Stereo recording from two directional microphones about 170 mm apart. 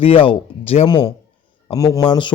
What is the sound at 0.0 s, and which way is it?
A man's voice, 30° left (ahead or behind).